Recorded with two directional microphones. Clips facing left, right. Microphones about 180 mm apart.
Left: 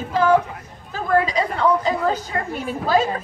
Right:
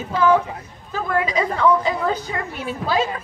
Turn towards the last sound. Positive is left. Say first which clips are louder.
# left 2 dB
turn(degrees=45)  # may be behind; listen again after turning